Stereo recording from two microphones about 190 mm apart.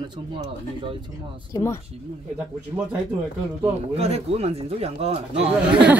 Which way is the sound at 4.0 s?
30° right (ahead or behind).